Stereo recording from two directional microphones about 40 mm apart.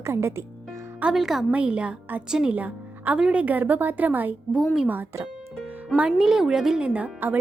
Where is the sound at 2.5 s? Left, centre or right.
Right.